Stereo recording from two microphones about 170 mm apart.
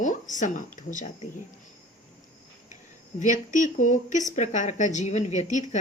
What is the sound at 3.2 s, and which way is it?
A woman's voice, 45° left (ahead or behind).